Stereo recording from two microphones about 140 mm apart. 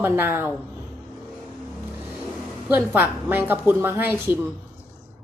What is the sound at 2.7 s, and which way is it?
Speech, 10° right (ahead or behind).